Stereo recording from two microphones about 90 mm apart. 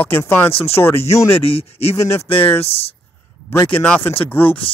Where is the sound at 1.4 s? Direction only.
90° left.